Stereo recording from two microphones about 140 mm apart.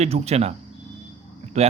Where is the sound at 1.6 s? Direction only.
50° right (ahead or behind).